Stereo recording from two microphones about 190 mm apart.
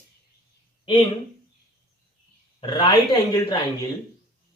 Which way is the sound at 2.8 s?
20° left (ahead or behind).